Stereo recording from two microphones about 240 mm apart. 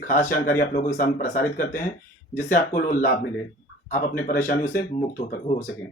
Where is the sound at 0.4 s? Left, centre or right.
Left.